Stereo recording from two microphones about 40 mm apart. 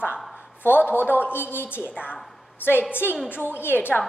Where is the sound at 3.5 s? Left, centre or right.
Left.